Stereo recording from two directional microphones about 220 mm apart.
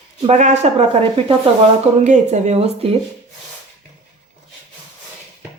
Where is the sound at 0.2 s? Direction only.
30° right (ahead or behind).